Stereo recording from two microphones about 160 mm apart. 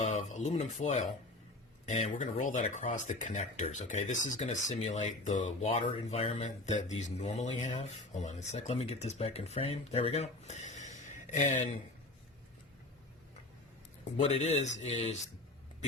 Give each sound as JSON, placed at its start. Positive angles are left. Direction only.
{"t": 0.0, "sound": "speech", "side_deg": 50}
{"t": 14.0, "sound": "speech", "side_deg": 40}